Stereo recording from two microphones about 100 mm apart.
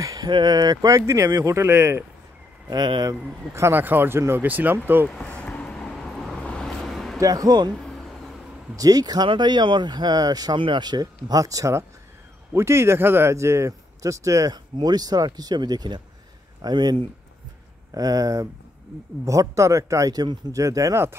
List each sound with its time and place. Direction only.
0.0 s a sound: 35° right (ahead or behind)
0.3 s speech: 45° right (ahead or behind); by 2.0 s 25° right (ahead or behind)
2.7 s speech: 45° right (ahead or behind)
3.5 s speech: 25° right (ahead or behind)
5.1 s vehicle: 10° left (ahead or behind)
7.2 s speech: 35° right (ahead or behind)
7.7 s vehicle: 5° left (ahead or behind)
8.7 s speech: 40° right (ahead or behind)